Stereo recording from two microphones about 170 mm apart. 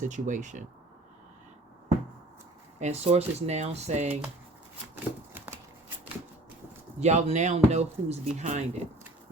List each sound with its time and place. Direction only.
0.0 s speech: 45° right (ahead or behind)
2.7 s speech: 40° right (ahead or behind)
7.0 s speech: 40° right (ahead or behind)